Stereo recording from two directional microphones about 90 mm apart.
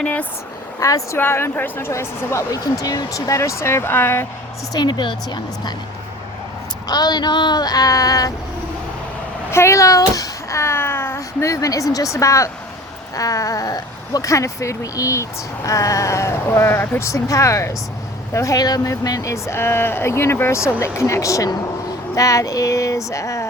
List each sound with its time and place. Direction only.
0.0 s a woman's voice: 15° left (ahead or behind)
0.8 s speech: 35° left (ahead or behind)
1.2 s a woman's voice: 25° left (ahead or behind)
1.9 s speech: 35° left (ahead or behind)
4.7 s speech: 50° left (ahead or behind)
6.8 s speech: 50° left (ahead or behind)
9.5 s speech: 30° left (ahead or behind)
17.1 s speech: 35° left (ahead or behind)